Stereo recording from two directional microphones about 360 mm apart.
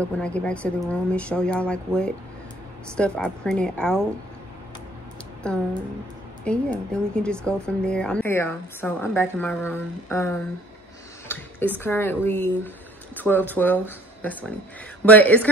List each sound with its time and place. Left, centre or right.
0.0 s a woman's voice: centre
5.4 s a woman's voice: centre
11.3 s a sound: centre
11.8 s a woman's voice: centre